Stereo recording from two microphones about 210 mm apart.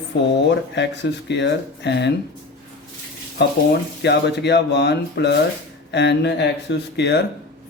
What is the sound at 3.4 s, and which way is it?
Speech, 55° left (ahead or behind).